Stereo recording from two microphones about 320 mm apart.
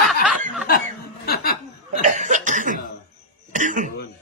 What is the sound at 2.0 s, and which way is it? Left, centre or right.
Cough, right.